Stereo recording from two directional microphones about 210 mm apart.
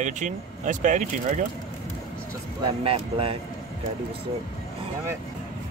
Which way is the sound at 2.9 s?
25° right (ahead or behind).